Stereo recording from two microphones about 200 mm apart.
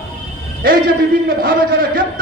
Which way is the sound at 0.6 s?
45° right (ahead or behind).